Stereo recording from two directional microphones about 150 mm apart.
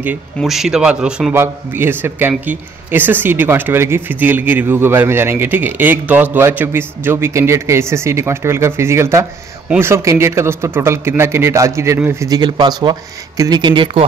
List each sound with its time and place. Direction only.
0.4 s a man's voice: centre (ahead or behind); by 14.0 s 30° right (ahead or behind)